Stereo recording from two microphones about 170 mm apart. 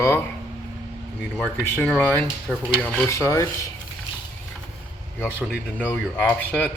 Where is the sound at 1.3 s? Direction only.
5° left (ahead or behind).